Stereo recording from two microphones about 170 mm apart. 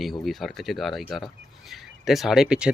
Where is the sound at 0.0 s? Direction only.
Centre (ahead or behind).